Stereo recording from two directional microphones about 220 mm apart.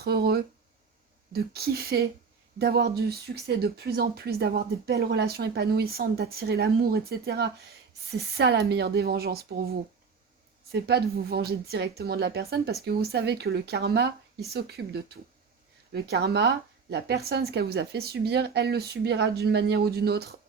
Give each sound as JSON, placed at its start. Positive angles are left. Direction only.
{"t": 0.0, "sound": "speech", "side_deg": -45}
{"t": 10.7, "sound": "speech", "side_deg": -50}